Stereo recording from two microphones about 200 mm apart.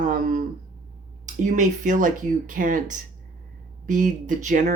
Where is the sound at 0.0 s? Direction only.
40° right (ahead or behind).